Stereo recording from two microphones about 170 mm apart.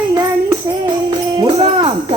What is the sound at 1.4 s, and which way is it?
Music, 25° right (ahead or behind).